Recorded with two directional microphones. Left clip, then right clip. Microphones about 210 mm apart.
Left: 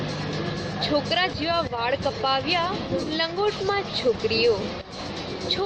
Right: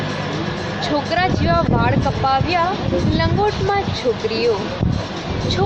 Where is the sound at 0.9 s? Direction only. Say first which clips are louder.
Right 5 dB; centre (ahead or behind).